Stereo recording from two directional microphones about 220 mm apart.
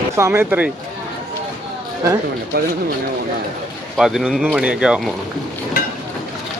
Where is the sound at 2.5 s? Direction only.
45° right (ahead or behind).